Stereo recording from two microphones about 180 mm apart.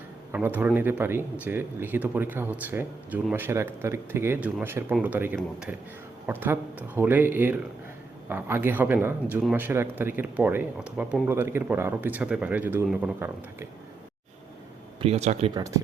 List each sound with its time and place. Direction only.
0.3 s speech: 10° right (ahead or behind)
15.0 s speech: 40° right (ahead or behind)
15.5 s speech: 20° right (ahead or behind)